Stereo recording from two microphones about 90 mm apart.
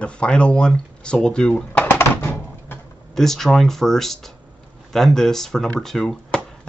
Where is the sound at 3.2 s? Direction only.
5° left (ahead or behind).